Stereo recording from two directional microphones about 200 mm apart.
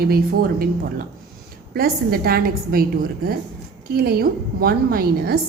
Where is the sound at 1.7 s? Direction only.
50° right (ahead or behind).